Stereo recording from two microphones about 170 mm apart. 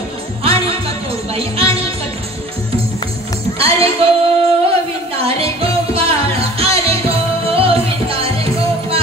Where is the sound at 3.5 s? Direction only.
35° right (ahead or behind).